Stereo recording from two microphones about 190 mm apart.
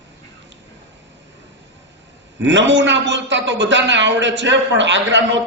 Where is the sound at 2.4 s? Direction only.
70° right (ahead or behind).